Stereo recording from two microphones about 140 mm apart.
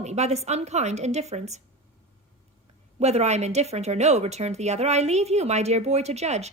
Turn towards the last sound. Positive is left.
turn(degrees=-50)  # may be behind; listen again after turning